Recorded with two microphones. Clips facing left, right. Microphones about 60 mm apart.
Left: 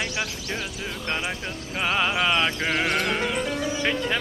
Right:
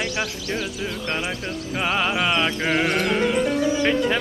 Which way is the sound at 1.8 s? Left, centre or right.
Centre.